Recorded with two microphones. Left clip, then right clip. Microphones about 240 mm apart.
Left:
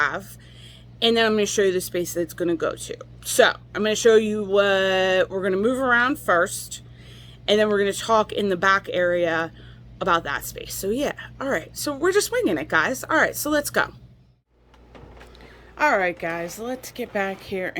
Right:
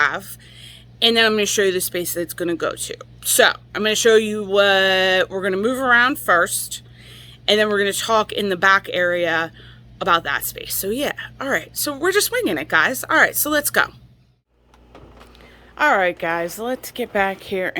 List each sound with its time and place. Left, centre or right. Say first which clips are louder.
0.0 s a woman's voice: right 4 dB; centre
15.7 s a woman's voice: right 4 dB; centre